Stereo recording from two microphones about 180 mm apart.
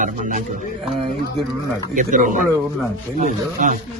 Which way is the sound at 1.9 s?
45° right (ahead or behind).